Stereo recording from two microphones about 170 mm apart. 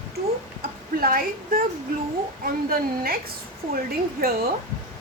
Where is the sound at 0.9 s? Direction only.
55° right (ahead or behind).